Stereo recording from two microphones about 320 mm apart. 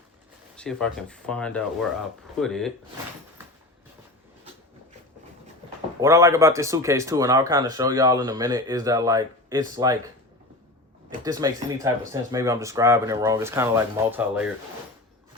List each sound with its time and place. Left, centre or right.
0.5 s speech: centre
6.0 s speech: centre
11.2 s speech: centre